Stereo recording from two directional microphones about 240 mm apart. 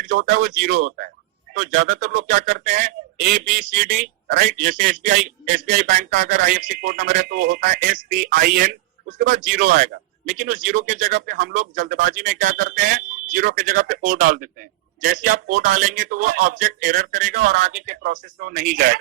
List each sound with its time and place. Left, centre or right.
0.2 s speech: right